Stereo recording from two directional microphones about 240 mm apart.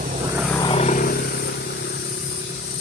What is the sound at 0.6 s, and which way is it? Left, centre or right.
Vehicle, left.